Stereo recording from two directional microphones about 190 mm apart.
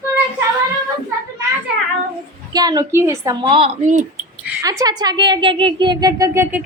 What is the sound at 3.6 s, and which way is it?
Speech, 40° right (ahead or behind).